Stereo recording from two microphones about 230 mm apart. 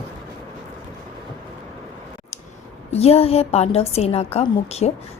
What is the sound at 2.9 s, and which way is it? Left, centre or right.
A woman's voice, left.